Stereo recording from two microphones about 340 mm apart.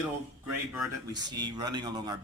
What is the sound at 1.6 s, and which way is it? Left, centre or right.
Speech, centre.